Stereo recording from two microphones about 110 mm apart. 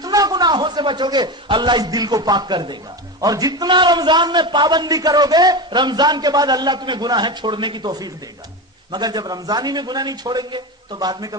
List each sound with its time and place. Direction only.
0.0 s a man's voice: 35° right (ahead or behind)